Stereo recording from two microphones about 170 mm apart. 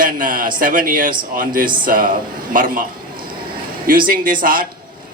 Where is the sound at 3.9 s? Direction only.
55° right (ahead or behind).